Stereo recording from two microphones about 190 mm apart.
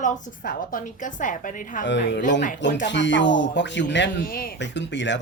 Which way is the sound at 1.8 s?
70° left (ahead or behind).